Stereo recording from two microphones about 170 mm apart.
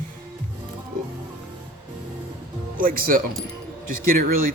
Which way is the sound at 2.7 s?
55° right (ahead or behind).